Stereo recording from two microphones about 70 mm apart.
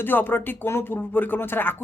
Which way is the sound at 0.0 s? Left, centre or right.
Left.